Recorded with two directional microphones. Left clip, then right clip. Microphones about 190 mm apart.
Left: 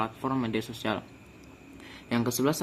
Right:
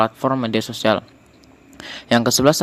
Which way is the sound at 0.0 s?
40° right (ahead or behind).